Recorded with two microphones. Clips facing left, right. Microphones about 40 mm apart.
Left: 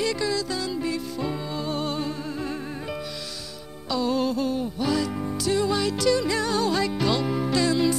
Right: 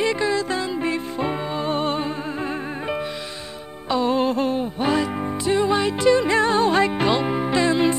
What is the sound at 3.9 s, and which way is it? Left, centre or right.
Music, right.